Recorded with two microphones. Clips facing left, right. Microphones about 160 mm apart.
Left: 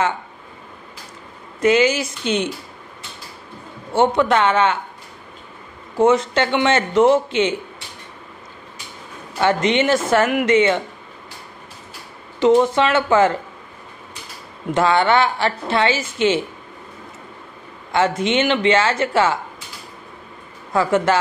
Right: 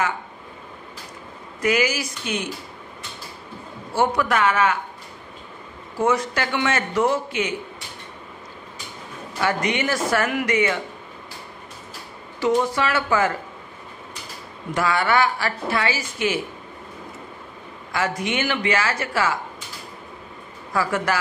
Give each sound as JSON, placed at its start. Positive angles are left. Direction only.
{"t": 1.6, "sound": "a woman's voice", "side_deg": 25}
{"t": 3.9, "sound": "a woman's voice", "side_deg": 25}
{"t": 5.9, "sound": "a woman's voice", "side_deg": 25}
{"t": 9.4, "sound": "a woman's voice", "side_deg": 25}
{"t": 12.4, "sound": "a woman's voice", "side_deg": 20}
{"t": 14.7, "sound": "a woman's voice", "side_deg": 25}
{"t": 17.9, "sound": "a woman's voice", "side_deg": 25}
{"t": 20.7, "sound": "a woman's voice", "side_deg": 25}